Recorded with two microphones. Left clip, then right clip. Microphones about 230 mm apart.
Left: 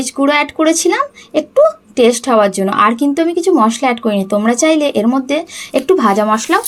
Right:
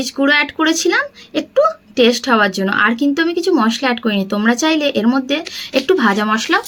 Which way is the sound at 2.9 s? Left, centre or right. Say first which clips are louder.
Left 2 dB; centre.